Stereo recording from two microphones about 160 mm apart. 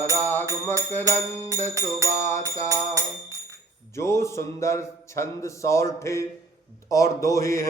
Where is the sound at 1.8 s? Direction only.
20° right (ahead or behind).